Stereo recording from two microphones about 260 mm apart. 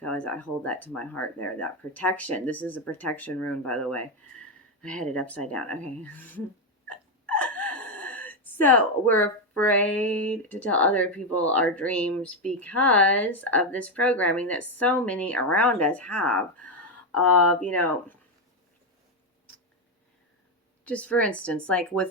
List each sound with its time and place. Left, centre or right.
0.0 s speech: centre
6.8 s gasp: centre
10.1 s speech: centre
20.8 s speech: centre